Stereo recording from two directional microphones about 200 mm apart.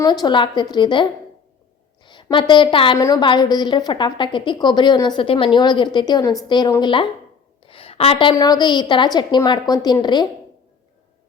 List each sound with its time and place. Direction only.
0.0 s a woman's voice: 20° left (ahead or behind)
2.0 s a woman's voice: 25° left (ahead or behind)